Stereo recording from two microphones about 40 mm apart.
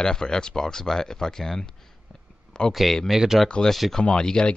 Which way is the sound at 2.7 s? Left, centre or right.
Centre.